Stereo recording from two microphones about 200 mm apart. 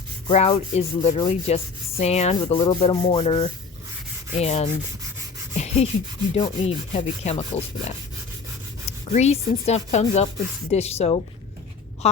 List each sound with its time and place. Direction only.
0.3 s rub: 30° left (ahead or behind)
9.1 s rub: 35° left (ahead or behind)